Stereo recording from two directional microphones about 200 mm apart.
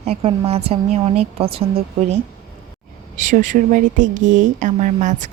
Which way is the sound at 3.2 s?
40° right (ahead or behind).